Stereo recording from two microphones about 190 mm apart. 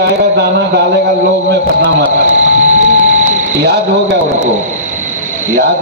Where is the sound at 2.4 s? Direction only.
40° right (ahead or behind).